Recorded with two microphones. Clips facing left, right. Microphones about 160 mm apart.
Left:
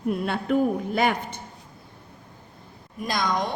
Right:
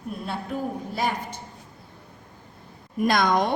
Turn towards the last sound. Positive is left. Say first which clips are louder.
# right 5 dB
turn(degrees=-55)  # may be behind; listen again after turning